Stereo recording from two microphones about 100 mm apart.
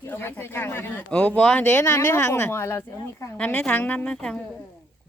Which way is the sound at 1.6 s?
25° left (ahead or behind).